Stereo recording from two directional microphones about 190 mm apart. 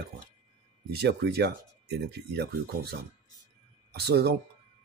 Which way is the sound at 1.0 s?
60° right (ahead or behind).